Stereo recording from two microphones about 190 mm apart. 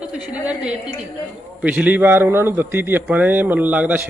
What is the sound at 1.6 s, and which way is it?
A man's voice, 10° right (ahead or behind).